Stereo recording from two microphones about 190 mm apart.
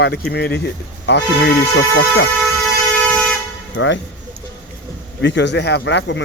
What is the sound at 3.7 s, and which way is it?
Speech, 75° left (ahead or behind).